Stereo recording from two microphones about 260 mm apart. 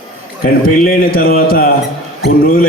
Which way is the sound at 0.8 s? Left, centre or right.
Left.